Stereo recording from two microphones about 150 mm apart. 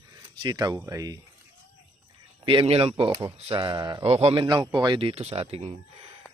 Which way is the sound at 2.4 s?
35° right (ahead or behind).